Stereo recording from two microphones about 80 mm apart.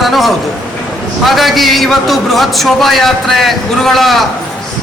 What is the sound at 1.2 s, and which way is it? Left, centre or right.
A man's voice, centre.